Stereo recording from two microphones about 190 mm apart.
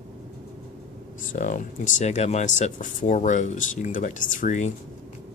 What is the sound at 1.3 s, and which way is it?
Speech, 45° left (ahead or behind).